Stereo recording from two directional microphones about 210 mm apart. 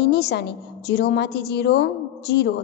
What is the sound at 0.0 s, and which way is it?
A woman's voice, 50° left (ahead or behind).